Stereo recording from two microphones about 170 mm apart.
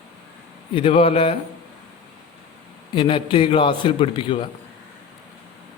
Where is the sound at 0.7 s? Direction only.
35° left (ahead or behind).